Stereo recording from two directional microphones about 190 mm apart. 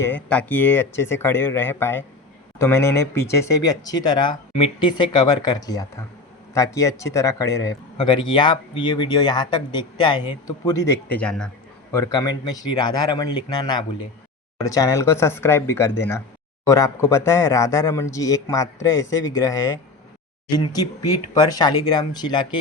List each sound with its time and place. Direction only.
0.0 s a man's voice: 5° left (ahead or behind)
11.9 s a man's voice: 15° left (ahead or behind)